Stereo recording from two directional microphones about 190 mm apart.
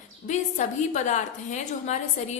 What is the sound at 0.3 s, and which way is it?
A woman's voice, 40° left (ahead or behind).